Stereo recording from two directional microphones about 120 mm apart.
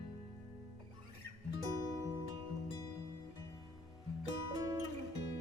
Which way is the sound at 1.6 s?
30° right (ahead or behind).